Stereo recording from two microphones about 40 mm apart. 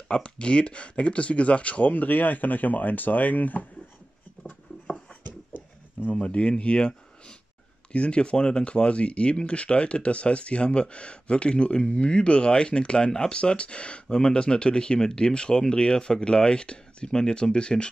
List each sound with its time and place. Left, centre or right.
0.1 s speech: left
6.1 s speech: left
7.9 s speech: left